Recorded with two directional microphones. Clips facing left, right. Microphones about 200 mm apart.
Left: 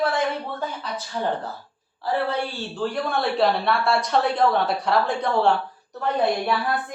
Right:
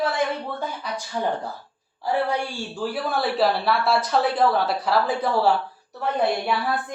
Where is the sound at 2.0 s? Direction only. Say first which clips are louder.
Right 1 dB; 15° right (ahead or behind).